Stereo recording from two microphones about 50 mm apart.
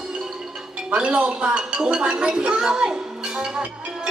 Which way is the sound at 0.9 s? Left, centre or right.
Right.